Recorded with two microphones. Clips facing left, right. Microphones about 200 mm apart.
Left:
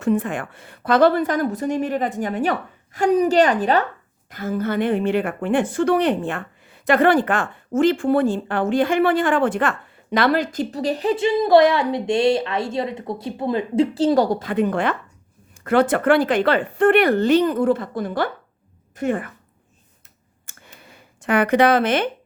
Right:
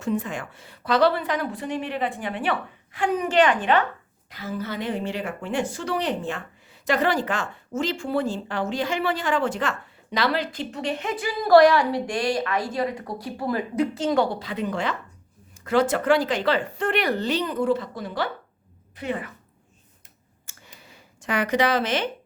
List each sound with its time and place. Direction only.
0.0 s a woman's voice: 55° left (ahead or behind); by 3.8 s 40° left (ahead or behind)
4.3 s a woman's voice: 50° left (ahead or behind)
20.5 s a sound: 55° left (ahead or behind)